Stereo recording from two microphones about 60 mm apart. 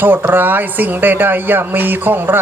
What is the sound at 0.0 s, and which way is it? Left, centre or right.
Speech, right.